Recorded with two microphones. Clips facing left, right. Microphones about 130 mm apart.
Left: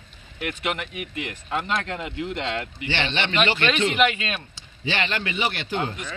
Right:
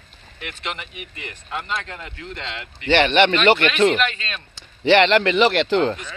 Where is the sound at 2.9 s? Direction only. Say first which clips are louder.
Right 10 dB; 60° right (ahead or behind).